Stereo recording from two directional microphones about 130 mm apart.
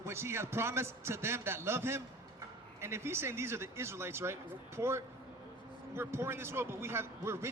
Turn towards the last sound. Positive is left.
turn(degrees=-20)  # may be behind; listen again after turning